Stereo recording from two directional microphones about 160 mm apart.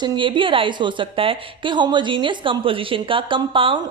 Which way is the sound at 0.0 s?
30° right (ahead or behind).